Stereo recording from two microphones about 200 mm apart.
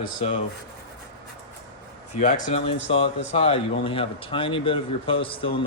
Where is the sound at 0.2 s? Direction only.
30° left (ahead or behind).